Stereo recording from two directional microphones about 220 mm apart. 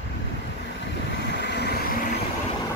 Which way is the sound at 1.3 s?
50° left (ahead or behind).